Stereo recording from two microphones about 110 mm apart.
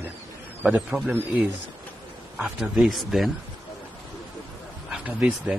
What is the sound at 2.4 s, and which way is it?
Speech, 5° right (ahead or behind).